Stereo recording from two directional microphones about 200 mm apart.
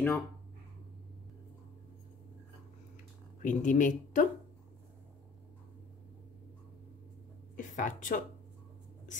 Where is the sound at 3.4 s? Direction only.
40° left (ahead or behind).